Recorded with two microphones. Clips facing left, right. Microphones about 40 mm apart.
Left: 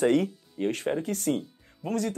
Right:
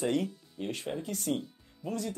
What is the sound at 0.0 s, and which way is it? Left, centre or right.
Speech, left.